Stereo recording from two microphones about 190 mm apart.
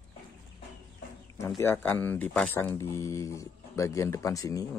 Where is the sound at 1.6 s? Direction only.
10° left (ahead or behind).